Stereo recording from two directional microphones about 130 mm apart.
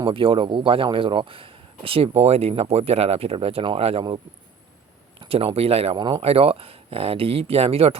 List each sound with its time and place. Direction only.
0.0 s a man's voice: 40° right (ahead or behind)
5.2 s a man's voice: 40° right (ahead or behind)
6.0 s speech: 35° right (ahead or behind)
6.2 s a man's voice: 50° right (ahead or behind)